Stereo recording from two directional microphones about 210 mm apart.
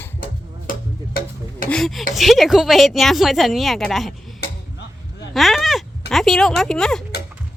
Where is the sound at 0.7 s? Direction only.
45° left (ahead or behind).